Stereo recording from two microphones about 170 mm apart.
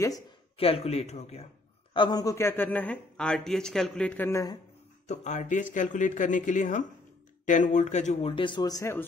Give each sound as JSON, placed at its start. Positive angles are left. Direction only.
{"t": 0.6, "sound": "speech", "side_deg": 35}
{"t": 2.0, "sound": "a man's voice", "side_deg": 25}
{"t": 5.0, "sound": "speech", "side_deg": 45}